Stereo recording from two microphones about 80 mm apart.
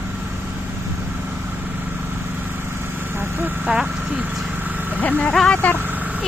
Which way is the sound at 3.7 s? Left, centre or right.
Centre.